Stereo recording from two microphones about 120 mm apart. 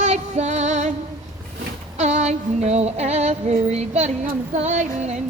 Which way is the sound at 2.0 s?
70° right (ahead or behind).